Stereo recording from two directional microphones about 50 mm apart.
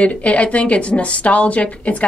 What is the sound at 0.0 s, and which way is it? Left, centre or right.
A woman's voice, left.